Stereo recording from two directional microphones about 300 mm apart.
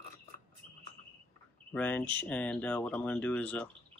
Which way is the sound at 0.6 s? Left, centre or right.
Right.